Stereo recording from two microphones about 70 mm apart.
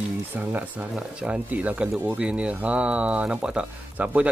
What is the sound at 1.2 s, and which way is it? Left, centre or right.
Speech, centre.